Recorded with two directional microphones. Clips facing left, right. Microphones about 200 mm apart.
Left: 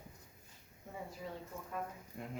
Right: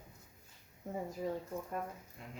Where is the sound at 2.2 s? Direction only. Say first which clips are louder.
Left 5 dB; 55° left (ahead or behind).